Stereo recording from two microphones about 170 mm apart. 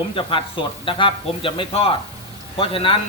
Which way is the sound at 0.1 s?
30° left (ahead or behind).